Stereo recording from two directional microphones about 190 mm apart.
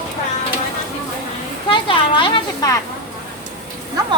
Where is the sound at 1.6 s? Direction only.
25° left (ahead or behind).